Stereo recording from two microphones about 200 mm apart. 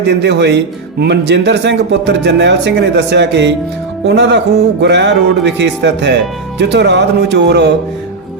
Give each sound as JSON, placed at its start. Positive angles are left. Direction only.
{"t": 0.0, "sound": "speech", "side_deg": -60}